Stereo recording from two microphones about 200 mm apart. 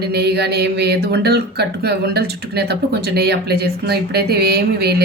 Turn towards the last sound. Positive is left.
turn(degrees=-55)  # may be behind; listen again after turning